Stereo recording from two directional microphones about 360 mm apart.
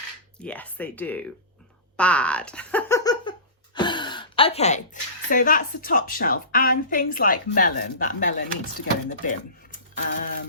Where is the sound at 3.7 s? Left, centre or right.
Centre.